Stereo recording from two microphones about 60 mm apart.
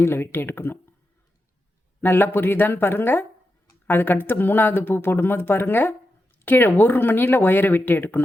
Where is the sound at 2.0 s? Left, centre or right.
Left.